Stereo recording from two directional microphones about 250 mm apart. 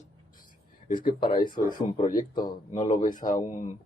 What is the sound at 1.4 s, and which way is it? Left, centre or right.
Speech, left.